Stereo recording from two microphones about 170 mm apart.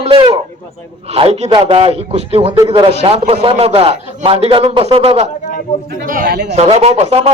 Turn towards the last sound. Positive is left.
turn(degrees=-40)  # may be behind; listen again after turning